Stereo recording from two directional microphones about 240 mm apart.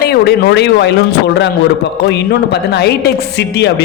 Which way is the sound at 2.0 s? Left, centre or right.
Left.